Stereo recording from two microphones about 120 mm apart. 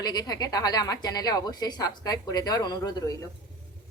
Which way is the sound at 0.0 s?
35° left (ahead or behind).